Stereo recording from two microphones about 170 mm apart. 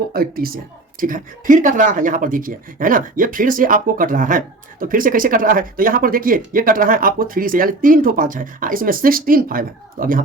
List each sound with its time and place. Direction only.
0.1 s speech: 60° right (ahead or behind)